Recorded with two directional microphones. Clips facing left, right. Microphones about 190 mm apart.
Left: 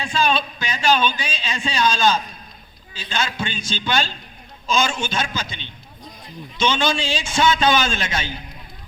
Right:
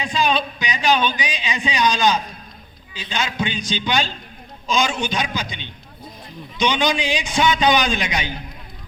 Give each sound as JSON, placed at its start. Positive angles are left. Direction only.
{"t": 0.0, "sound": "a man's voice", "side_deg": -15}